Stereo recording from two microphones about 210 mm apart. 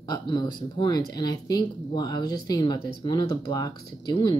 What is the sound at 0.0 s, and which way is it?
A woman's voice, 20° left (ahead or behind).